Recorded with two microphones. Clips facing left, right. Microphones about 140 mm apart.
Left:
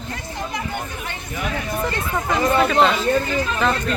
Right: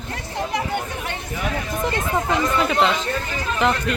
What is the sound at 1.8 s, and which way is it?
Speech, 15° right (ahead or behind).